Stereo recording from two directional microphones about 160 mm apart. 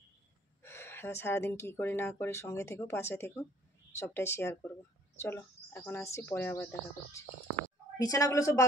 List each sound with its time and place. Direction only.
0.6 s speech: 15° left (ahead or behind)